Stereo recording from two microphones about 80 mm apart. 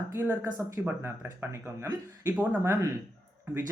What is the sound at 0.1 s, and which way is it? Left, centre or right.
Speech, right.